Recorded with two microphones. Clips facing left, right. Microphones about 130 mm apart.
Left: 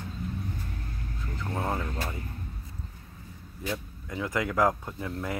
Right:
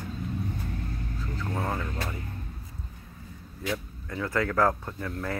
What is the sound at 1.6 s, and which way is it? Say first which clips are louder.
Speech: left 2 dB; 20° left (ahead or behind).